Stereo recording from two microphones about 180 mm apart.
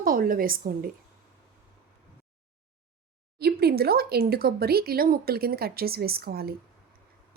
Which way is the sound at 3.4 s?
60° right (ahead or behind).